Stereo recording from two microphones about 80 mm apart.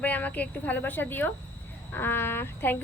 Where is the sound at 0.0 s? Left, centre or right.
Centre.